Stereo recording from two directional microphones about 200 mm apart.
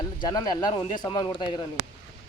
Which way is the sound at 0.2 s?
20° left (ahead or behind).